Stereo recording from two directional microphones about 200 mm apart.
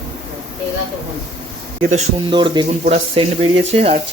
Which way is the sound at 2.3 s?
25° right (ahead or behind).